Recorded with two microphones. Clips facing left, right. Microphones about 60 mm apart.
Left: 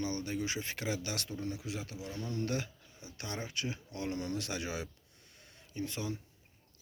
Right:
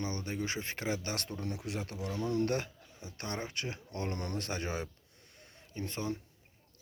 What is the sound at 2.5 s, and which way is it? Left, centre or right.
Speech, right.